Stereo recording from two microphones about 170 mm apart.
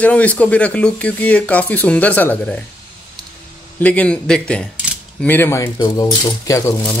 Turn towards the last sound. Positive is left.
turn(degrees=20)  # may be behind; listen again after turning